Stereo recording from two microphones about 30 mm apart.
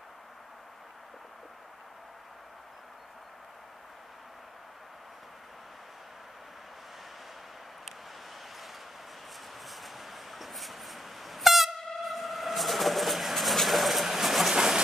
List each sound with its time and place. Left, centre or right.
9.7 s vehicle horn: centre
14.0 s pigeon: centre
14.5 s train: right